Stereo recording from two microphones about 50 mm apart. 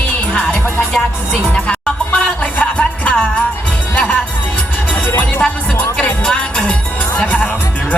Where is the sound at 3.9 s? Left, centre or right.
Left.